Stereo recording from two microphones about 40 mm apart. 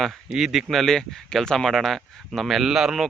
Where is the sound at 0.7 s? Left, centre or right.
Centre.